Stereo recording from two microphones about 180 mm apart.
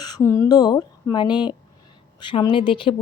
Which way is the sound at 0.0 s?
20° left (ahead or behind).